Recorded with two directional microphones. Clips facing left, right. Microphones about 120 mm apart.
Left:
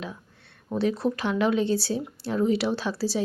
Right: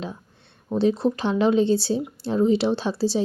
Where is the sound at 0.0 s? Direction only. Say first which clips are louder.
Right 3 dB; 25° right (ahead or behind).